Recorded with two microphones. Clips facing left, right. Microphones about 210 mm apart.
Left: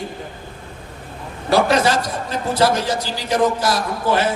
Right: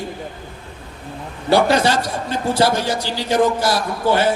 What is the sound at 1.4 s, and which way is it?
A man's voice, 30° right (ahead or behind).